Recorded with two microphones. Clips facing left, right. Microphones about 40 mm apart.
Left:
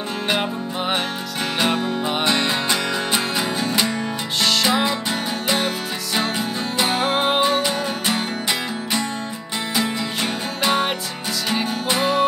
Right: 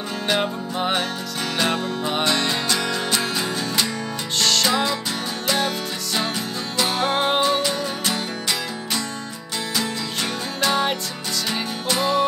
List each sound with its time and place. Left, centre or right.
0.3 s music: centre
4.4 s music: centre
6.1 s music: left
10.6 s music: centre